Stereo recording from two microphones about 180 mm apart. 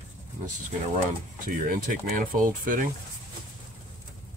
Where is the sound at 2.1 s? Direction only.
50° right (ahead or behind).